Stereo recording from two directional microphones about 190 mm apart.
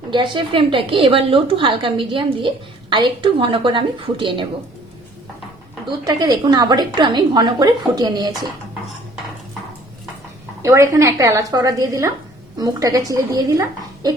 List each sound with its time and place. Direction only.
0.1 s a woman's voice: 25° right (ahead or behind)
5.8 s a woman's voice: 20° right (ahead or behind)
10.6 s a woman's voice: 15° right (ahead or behind)